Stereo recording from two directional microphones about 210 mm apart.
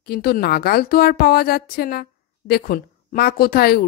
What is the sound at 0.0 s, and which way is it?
A woman's voice, 50° left (ahead or behind).